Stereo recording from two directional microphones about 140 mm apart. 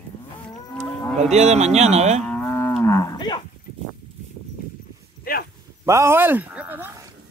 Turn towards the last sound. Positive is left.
turn(degrees=-10)  # may be behind; listen again after turning